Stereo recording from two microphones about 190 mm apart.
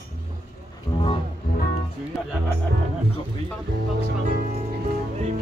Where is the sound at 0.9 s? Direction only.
25° left (ahead or behind).